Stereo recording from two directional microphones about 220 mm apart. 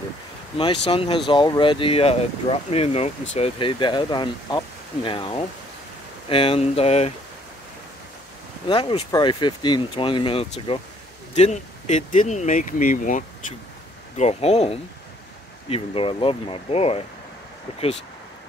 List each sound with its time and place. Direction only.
0.8 s speech: 25° left (ahead or behind)
8.6 s speech: 20° left (ahead or behind)